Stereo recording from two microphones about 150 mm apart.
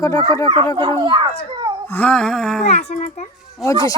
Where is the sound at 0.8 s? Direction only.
30° right (ahead or behind).